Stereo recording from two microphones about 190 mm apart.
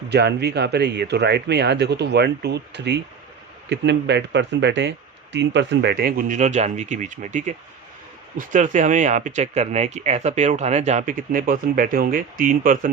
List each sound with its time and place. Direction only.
0.1 s speech: 60° right (ahead or behind); by 12.9 s 45° right (ahead or behind)